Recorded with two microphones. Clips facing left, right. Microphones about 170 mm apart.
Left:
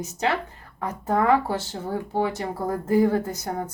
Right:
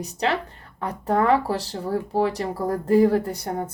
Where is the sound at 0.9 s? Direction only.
35° right (ahead or behind).